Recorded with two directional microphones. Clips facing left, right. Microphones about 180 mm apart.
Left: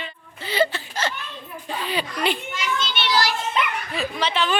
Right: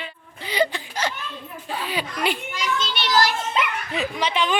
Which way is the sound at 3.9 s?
15° right (ahead or behind).